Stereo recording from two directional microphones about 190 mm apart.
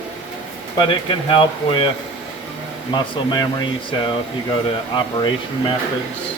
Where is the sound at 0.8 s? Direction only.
25° left (ahead or behind).